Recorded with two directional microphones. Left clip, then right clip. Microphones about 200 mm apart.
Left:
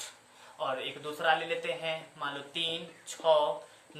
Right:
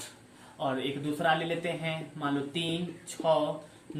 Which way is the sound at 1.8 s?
30° left (ahead or behind).